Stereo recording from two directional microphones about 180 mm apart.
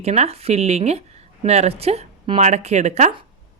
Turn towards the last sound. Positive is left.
turn(degrees=-40)  # may be behind; listen again after turning